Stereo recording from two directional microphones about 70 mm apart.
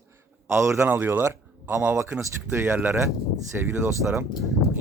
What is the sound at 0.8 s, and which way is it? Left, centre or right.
Speech, right.